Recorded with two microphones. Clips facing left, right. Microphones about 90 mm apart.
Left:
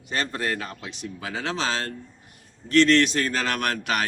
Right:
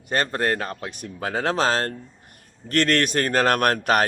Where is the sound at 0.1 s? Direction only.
50° right (ahead or behind).